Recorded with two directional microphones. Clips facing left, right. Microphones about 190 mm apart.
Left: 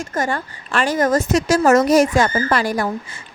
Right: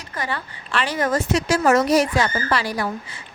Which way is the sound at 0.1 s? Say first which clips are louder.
Left 4 dB; 45° left (ahead or behind).